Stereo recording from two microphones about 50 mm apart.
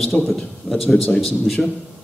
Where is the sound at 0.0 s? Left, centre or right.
Centre.